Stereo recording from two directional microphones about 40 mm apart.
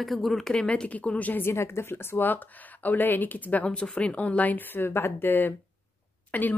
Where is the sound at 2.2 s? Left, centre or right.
Left.